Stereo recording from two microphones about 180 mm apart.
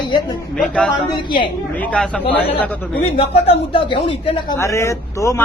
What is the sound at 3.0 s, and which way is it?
A man's voice, 30° left (ahead or behind).